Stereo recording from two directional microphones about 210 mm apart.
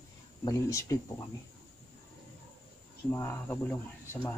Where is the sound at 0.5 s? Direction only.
15° left (ahead or behind).